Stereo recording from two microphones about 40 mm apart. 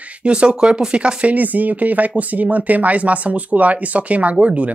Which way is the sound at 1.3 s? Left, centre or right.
Right.